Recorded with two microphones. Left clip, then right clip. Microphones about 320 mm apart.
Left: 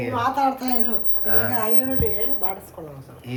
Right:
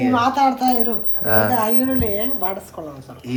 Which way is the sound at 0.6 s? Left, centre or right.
Centre.